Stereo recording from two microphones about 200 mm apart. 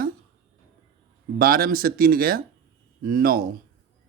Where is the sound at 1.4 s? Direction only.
50° right (ahead or behind).